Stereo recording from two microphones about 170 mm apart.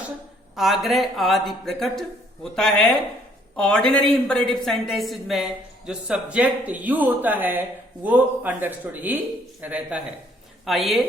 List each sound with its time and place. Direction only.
0.5 s a man's voice: centre (ahead or behind)